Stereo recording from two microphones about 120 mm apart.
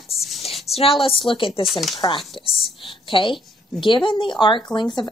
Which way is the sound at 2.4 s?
45° left (ahead or behind).